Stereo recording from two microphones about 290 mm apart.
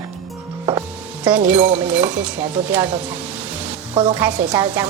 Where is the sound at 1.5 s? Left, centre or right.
Centre.